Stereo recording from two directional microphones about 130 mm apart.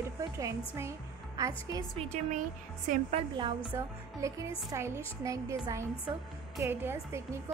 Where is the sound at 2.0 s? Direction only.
55° right (ahead or behind).